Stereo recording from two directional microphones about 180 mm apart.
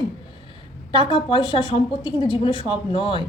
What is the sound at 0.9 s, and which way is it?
Speech, 25° left (ahead or behind).